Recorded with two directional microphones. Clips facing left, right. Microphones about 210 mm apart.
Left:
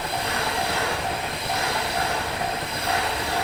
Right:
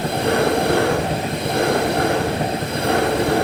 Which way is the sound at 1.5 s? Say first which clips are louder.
Right 11 dB; 50° right (ahead or behind).